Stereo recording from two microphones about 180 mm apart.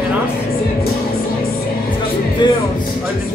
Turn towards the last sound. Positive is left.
turn(degrees=25)  # may be behind; listen again after turning